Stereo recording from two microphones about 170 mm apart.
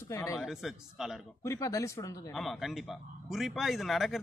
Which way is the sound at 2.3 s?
Centre (ahead or behind).